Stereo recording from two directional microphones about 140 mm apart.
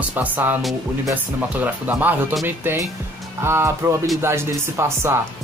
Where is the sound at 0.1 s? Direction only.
15° right (ahead or behind).